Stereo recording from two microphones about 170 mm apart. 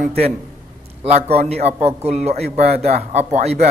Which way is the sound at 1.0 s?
40° right (ahead or behind).